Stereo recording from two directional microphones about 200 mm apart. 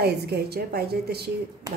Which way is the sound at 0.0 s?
55° right (ahead or behind).